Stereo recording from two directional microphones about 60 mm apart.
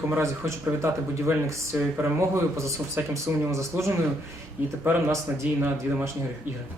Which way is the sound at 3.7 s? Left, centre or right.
Right.